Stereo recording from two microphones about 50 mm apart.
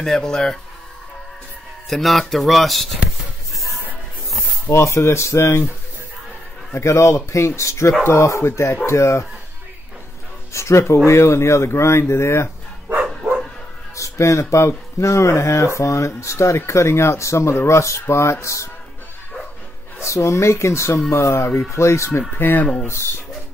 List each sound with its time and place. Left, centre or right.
0.0 s speech: centre
1.9 s speech: centre
4.8 s speech: left
6.7 s speech: left
10.5 s speech: left
13.9 s speech: left
20.0 s speech: left
22.3 s speech: left
22.8 s speech: left